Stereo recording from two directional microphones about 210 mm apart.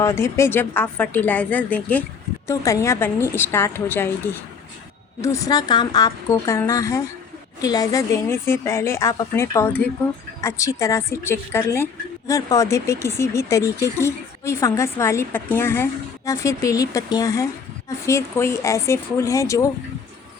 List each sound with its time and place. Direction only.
0.0 s speech: 10° left (ahead or behind)